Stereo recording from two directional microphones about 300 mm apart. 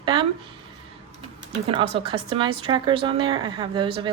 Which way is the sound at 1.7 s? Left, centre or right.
Centre.